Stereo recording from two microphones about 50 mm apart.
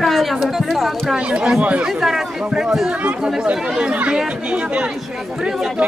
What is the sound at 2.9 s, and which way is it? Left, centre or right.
Speech, right.